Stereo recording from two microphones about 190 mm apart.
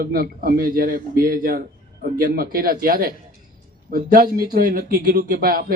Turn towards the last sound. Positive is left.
turn(degrees=-50)  # may be behind; listen again after turning